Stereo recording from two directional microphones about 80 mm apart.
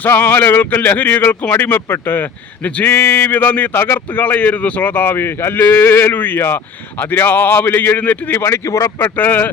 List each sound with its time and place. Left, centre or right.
0.0 s speech: left
2.6 s a sound: centre
2.9 s speech: left
9.0 s speech: left